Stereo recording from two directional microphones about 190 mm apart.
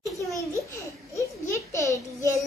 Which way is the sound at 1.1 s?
15° left (ahead or behind).